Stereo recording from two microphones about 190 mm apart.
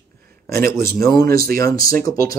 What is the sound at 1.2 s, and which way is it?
Speech, 50° right (ahead or behind).